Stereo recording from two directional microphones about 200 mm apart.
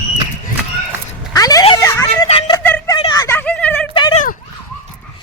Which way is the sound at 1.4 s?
15° left (ahead or behind).